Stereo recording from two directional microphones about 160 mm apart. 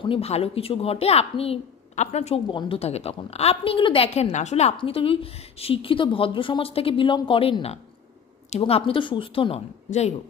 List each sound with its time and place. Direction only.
0.0 s a woman's voice: 35° left (ahead or behind)
9.8 s speech: 45° left (ahead or behind)